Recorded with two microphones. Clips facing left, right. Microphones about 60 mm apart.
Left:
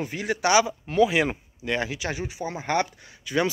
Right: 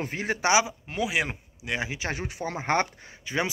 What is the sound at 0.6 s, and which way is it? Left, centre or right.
Speech, centre.